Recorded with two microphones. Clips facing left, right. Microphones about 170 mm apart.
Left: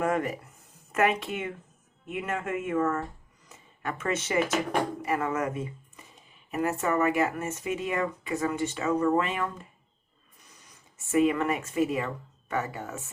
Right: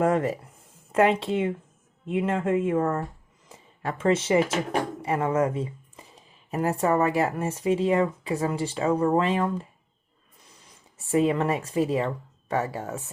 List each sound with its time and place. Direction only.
0.0 s speech: 30° right (ahead or behind)
10.9 s speech: 30° right (ahead or behind)